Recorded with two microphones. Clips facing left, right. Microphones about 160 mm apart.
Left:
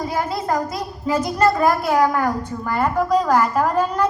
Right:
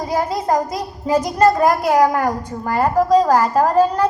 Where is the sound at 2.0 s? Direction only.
40° right (ahead or behind).